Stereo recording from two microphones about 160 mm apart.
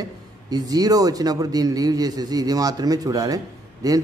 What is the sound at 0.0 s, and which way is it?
A man's voice, 25° right (ahead or behind).